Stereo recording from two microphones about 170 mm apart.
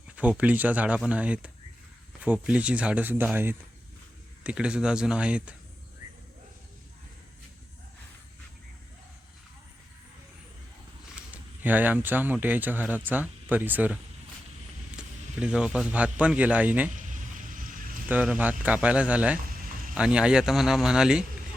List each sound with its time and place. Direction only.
0.2 s speech: 10° right (ahead or behind)
11.1 s speech: 10° right (ahead or behind)
16.9 s a sound: 50° right (ahead or behind)
18.1 s speech: 10° right (ahead or behind)